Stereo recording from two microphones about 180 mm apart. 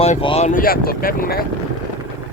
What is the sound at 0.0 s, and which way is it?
Speech, 30° left (ahead or behind).